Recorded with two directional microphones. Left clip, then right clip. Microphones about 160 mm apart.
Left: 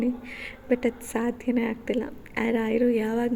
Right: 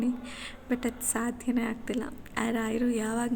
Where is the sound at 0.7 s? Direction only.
15° left (ahead or behind).